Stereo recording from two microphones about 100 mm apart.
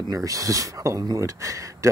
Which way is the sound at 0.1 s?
35° right (ahead or behind).